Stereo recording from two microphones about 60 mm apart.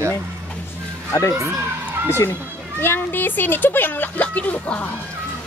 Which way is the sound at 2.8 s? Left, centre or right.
Left.